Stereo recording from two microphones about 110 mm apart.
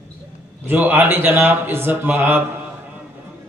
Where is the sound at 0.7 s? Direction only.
15° right (ahead or behind).